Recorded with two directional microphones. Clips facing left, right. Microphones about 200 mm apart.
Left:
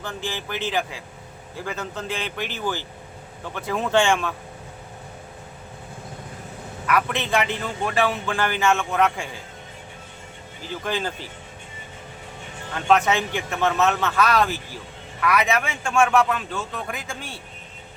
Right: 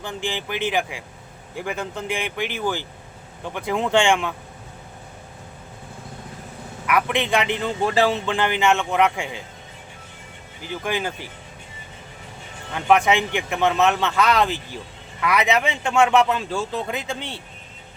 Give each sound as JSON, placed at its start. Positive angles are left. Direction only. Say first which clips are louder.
{"t": 0.0, "sound": "a man's voice", "louder": "right 2 dB", "side_deg": -15}
{"t": 6.8, "sound": "a man's voice", "louder": "right 2 dB", "side_deg": -15}
{"t": 10.6, "sound": "a man's voice", "louder": "right 1 dB", "side_deg": -15}
{"t": 12.7, "sound": "a man's voice", "louder": "right 2 dB", "side_deg": -15}